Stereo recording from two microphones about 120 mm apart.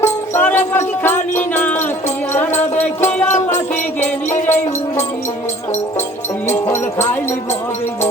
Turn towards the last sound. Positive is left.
turn(degrees=15)  # may be behind; listen again after turning